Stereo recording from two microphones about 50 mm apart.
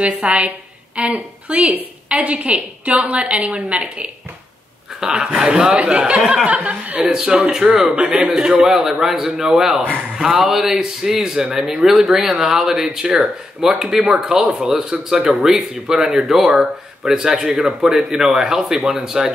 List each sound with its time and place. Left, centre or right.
0.0 s a woman's voice: right
5.0 s a woman's voice: centre
8.3 s speech: centre
9.8 s speech: right
10.2 s speech: centre